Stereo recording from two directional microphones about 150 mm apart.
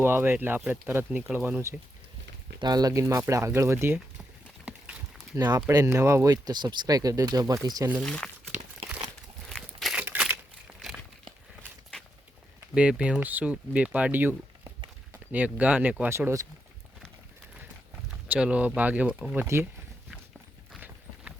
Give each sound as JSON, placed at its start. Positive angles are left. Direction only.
{"t": 0.0, "sound": "speech", "side_deg": -15}
{"t": 2.6, "sound": "speech", "side_deg": -25}
{"t": 4.6, "sound": "a sound", "side_deg": -5}
{"t": 5.5, "sound": "speech", "side_deg": -20}
{"t": 8.0, "sound": "crumpling", "side_deg": 5}
{"t": 12.5, "sound": "speech", "side_deg": -5}
{"t": 18.3, "sound": "speech", "side_deg": -5}